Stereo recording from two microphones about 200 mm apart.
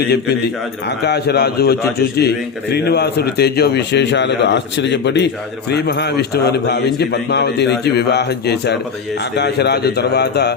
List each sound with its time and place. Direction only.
1.0 s a man's voice: 55° left (ahead or behind)